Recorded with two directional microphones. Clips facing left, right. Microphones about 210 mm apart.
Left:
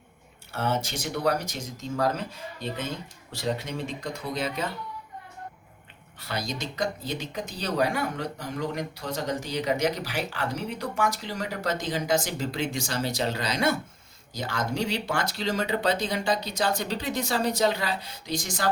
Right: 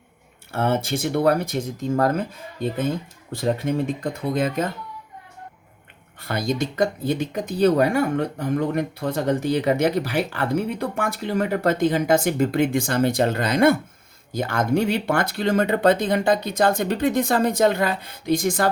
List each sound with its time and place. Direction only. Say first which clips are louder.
0.5 s speech: right 6 dB; 50° right (ahead or behind)
6.1 s speech: right 9 dB; 55° right (ahead or behind)